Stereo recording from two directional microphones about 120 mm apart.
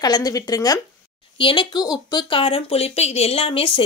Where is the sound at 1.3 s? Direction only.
45° left (ahead or behind).